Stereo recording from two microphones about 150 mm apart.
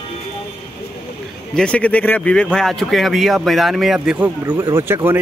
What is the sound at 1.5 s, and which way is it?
Speech, 5° left (ahead or behind).